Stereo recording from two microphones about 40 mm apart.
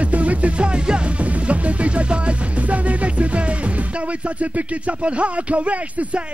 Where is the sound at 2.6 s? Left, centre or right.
Right.